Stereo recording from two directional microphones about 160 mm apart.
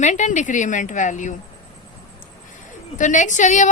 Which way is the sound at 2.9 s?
50° left (ahead or behind).